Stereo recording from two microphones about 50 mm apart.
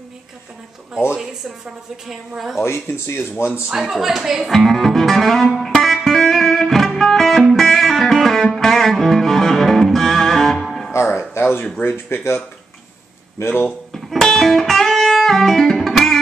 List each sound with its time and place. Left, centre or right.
2.0 s music: centre
2.6 s speech: left
3.7 s speech: centre
4.5 s music: centre
11.3 s a sound: left
12.1 s speech: left
13.4 s speech: left
13.9 s music: centre